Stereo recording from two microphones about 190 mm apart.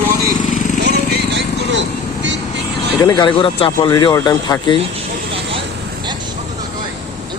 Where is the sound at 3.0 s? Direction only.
20° left (ahead or behind).